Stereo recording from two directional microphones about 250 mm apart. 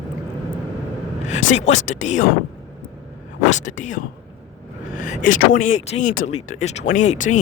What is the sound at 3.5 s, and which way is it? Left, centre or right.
Speech, left.